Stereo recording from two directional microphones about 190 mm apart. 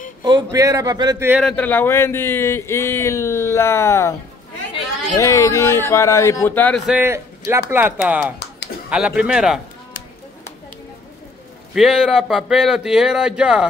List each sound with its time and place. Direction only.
0.2 s speech: 25° right (ahead or behind)
1.3 s speech: 5° left (ahead or behind)
5.1 s speech: 15° left (ahead or behind)
6.9 s speech: 10° right (ahead or behind)
11.7 s speech: centre (ahead or behind)